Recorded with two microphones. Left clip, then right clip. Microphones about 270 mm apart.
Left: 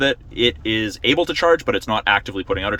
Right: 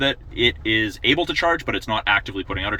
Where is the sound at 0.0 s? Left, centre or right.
Centre.